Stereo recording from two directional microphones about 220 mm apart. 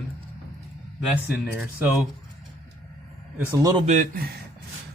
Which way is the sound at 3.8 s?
35° right (ahead or behind).